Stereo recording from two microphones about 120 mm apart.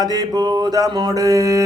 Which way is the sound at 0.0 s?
35° right (ahead or behind).